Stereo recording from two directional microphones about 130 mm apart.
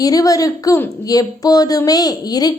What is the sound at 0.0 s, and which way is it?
A woman's voice, 25° left (ahead or behind).